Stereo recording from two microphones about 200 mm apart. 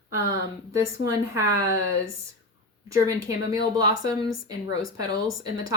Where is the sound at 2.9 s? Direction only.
15° right (ahead or behind).